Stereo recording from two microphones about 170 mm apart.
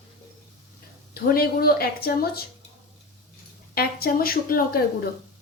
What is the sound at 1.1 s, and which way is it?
Speech, 65° left (ahead or behind).